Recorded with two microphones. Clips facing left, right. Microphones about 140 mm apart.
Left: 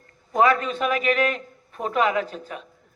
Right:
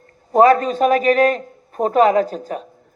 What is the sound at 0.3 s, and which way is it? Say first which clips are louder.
A man's voice: right 8 dB; 40° right (ahead or behind).